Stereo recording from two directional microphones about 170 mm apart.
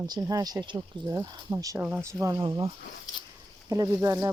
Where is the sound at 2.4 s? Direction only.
30° right (ahead or behind).